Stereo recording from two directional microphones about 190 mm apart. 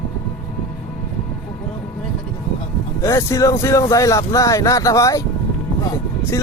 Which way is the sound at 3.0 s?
15° left (ahead or behind).